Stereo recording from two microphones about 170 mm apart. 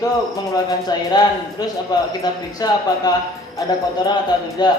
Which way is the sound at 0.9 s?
25° left (ahead or behind).